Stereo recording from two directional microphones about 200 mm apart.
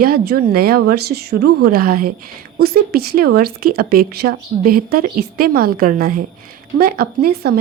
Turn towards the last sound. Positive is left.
turn(degrees=-50)  # may be behind; listen again after turning